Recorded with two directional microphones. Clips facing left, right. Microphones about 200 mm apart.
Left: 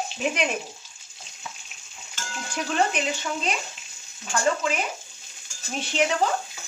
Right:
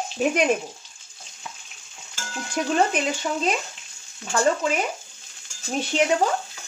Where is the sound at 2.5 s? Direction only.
40° right (ahead or behind).